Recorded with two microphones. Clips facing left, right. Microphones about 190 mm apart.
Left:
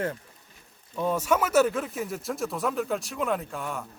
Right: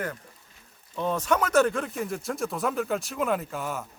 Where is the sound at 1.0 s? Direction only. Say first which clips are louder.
Left 1 dB; 10° left (ahead or behind).